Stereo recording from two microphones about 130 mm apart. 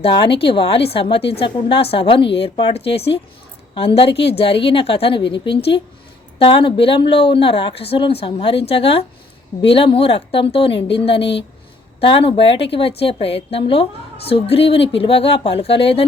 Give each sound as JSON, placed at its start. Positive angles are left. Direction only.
{"t": 0.0, "sound": "a woman's voice", "side_deg": 40}